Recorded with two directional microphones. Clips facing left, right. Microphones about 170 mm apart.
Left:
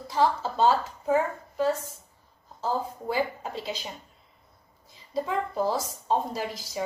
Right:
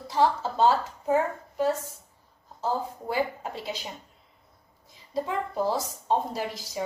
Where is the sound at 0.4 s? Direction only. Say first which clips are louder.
Even; 15° right (ahead or behind).